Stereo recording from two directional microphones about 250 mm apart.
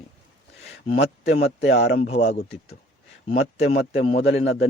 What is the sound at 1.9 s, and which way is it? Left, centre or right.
A man's voice, left.